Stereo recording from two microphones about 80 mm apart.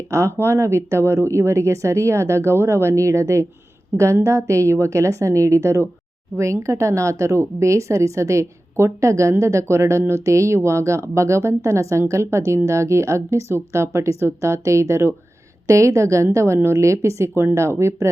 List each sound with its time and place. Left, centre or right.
0.1 s speech: right